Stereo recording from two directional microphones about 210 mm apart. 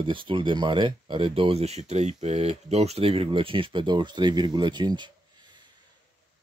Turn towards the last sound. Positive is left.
turn(degrees=-20)  # may be behind; listen again after turning